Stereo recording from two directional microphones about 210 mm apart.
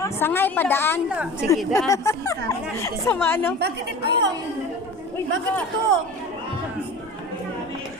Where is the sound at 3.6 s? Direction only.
55° right (ahead or behind).